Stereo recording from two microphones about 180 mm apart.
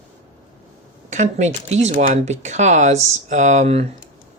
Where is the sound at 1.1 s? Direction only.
40° right (ahead or behind).